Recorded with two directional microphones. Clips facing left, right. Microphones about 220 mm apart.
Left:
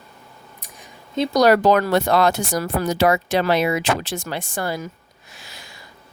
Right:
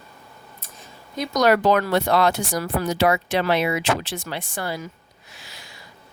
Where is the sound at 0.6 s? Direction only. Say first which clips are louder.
Left 1 dB; 15° left (ahead or behind).